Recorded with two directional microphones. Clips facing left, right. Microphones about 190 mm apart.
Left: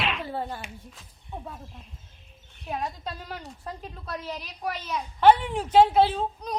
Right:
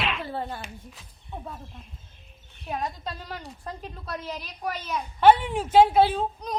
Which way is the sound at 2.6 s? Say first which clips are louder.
Right 1 dB; 5° left (ahead or behind).